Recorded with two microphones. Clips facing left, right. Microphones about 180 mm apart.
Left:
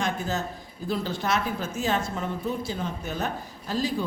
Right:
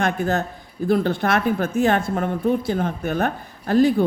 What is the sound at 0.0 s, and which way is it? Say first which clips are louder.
Speech: right 7 dB; 55° right (ahead or behind).